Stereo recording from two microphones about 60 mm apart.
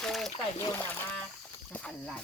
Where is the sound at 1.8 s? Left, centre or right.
Centre.